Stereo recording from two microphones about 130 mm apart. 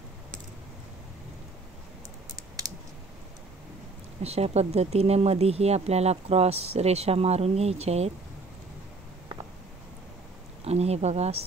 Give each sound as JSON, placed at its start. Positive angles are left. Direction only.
{"t": 4.2, "sound": "speech", "side_deg": -55}
{"t": 10.6, "sound": "speech", "side_deg": -55}